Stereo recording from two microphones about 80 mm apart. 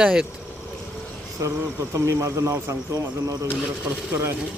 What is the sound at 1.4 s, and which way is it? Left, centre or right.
Speech, right.